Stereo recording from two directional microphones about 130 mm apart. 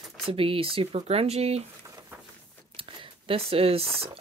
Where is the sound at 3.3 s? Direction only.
45° right (ahead or behind).